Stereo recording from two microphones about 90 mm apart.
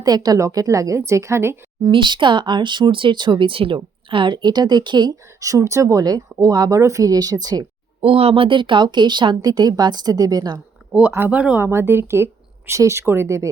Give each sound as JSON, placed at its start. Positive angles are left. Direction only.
{"t": 0.0, "sound": "a woman's voice", "side_deg": -45}
{"t": 1.9, "sound": "speech", "side_deg": -65}
{"t": 4.1, "sound": "speech", "side_deg": -65}
{"t": 5.4, "sound": "a woman's voice", "side_deg": -40}
{"t": 8.0, "sound": "speech", "side_deg": -90}
{"t": 11.3, "sound": "speech", "side_deg": -15}
{"t": 11.6, "sound": "speech", "side_deg": -30}